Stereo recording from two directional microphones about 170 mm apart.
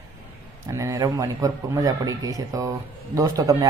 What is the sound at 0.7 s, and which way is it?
Speech, 20° right (ahead or behind).